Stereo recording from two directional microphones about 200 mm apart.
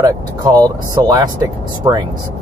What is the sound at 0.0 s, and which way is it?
Speech, 20° right (ahead or behind).